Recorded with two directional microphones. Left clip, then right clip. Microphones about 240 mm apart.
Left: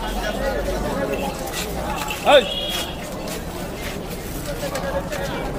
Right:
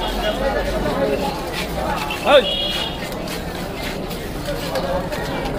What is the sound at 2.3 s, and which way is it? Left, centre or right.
Speech, left.